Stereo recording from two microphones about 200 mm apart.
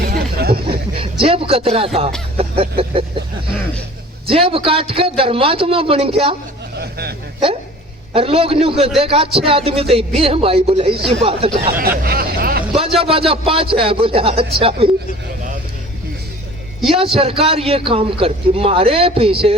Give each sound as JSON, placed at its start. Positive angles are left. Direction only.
{"t": 0.1, "sound": "a sound", "side_deg": -50}
{"t": 1.2, "sound": "a man's voice", "side_deg": -25}
{"t": 2.4, "sound": "a sound", "side_deg": -30}
{"t": 4.3, "sound": "a man's voice", "side_deg": -25}
{"t": 8.1, "sound": "a man's voice", "side_deg": -30}
{"t": 11.8, "sound": "speech", "side_deg": -50}
{"t": 13.0, "sound": "a man's voice", "side_deg": -30}
{"t": 16.8, "sound": "a man's voice", "side_deg": -30}